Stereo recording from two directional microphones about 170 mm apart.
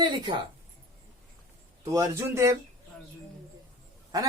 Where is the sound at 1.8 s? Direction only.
20° right (ahead or behind).